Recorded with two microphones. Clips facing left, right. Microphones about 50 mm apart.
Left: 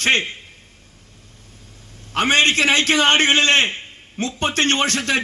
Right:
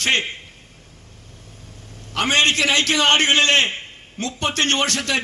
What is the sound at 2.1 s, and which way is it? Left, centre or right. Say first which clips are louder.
A man's voice: left 2 dB; left.